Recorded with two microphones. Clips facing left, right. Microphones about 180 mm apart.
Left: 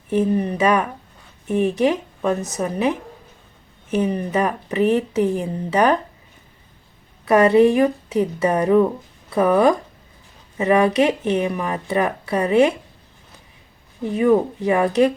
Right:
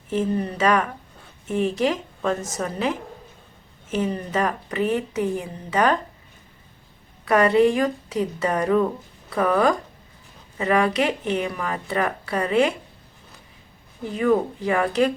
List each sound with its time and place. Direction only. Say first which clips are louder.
0.1 s speech: left 4 dB; 15° left (ahead or behind)
3.9 s speech: left 4 dB; 15° left (ahead or behind)
7.3 s speech: left 4 dB; 20° left (ahead or behind)
14.1 s speech: left 4 dB; 15° left (ahead or behind)